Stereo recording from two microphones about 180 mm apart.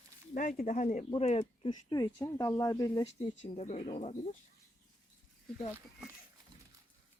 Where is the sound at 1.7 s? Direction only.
25° left (ahead or behind).